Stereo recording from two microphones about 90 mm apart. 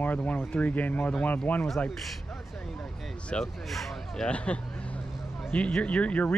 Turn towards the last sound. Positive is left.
turn(degrees=15)  # may be behind; listen again after turning